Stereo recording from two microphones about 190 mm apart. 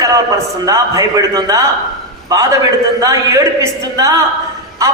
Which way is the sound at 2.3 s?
20° right (ahead or behind).